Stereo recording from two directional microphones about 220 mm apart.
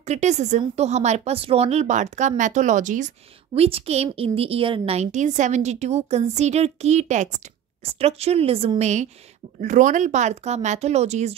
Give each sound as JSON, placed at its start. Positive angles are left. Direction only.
{"t": 0.0, "sound": "a woman's voice", "side_deg": -30}